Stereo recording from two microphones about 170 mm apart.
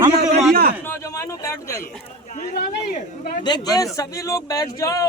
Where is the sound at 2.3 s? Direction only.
50° left (ahead or behind).